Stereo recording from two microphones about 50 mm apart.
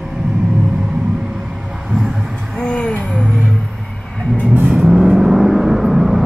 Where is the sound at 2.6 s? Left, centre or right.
Centre.